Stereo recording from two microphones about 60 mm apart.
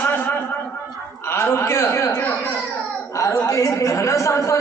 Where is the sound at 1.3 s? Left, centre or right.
Left.